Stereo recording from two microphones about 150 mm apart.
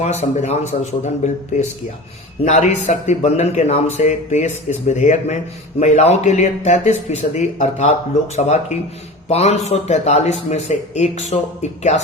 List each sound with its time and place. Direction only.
0.0 s a man's voice: 45° left (ahead or behind)